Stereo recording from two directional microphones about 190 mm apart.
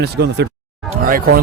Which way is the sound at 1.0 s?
50° right (ahead or behind).